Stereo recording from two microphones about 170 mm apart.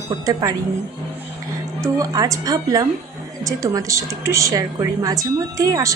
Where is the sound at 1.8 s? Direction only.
20° right (ahead or behind).